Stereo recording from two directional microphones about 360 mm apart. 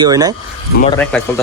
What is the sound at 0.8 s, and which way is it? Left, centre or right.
Speech, centre.